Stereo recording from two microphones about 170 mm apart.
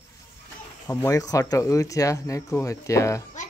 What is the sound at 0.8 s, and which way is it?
Speech, 20° left (ahead or behind).